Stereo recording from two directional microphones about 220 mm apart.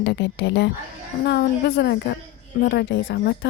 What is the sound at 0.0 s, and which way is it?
Speech, 55° left (ahead or behind).